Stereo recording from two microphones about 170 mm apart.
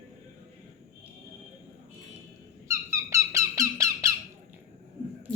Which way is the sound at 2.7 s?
20° right (ahead or behind).